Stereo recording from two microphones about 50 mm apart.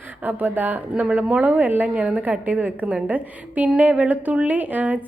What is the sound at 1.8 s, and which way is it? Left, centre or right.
A woman's voice, right.